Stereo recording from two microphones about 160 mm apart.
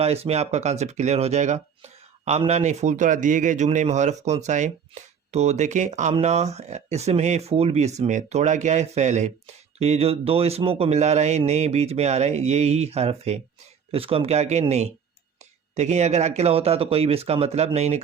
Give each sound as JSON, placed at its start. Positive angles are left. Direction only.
{"t": 0.0, "sound": "a man's voice", "side_deg": -40}